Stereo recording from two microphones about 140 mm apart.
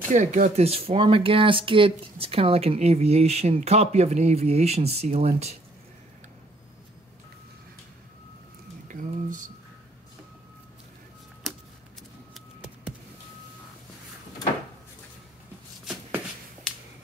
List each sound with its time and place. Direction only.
0.1 s speech: 60° right (ahead or behind)
8.8 s speech: 70° right (ahead or behind)
11.4 s a sound: centre (ahead or behind)